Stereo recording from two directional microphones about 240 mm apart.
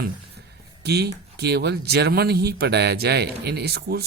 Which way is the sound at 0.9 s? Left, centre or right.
Right.